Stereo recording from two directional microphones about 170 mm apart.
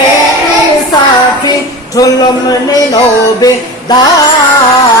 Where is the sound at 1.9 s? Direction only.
20° left (ahead or behind).